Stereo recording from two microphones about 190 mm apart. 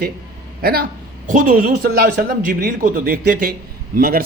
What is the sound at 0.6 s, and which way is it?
Speech, 55° right (ahead or behind).